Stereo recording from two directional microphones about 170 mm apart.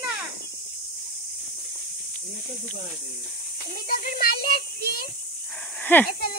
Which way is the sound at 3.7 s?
60° left (ahead or behind).